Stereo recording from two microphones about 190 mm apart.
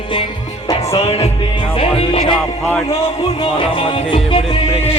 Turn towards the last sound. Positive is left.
turn(degrees=25)  # may be behind; listen again after turning